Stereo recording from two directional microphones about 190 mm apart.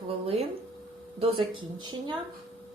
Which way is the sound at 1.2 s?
25° right (ahead or behind).